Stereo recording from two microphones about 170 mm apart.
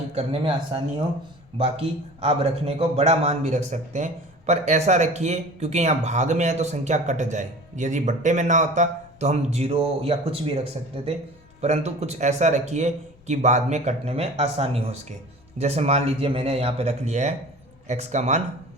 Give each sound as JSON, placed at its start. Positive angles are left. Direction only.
{"t": 0.1, "sound": "a man's voice", "side_deg": -35}